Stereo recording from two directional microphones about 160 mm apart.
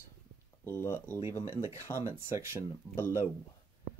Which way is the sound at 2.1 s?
15° right (ahead or behind).